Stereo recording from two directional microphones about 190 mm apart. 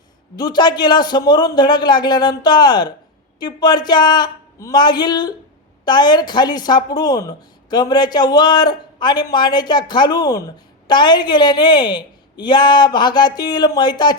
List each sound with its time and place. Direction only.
0.3 s speech: 20° left (ahead or behind)